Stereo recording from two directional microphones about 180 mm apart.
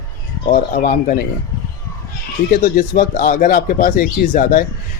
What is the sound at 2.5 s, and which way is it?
Speech, 55° left (ahead or behind).